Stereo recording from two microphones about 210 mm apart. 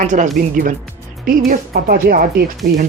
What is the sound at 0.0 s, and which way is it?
Speech, 35° right (ahead or behind).